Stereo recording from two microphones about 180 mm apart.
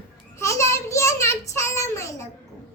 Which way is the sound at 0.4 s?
15° left (ahead or behind).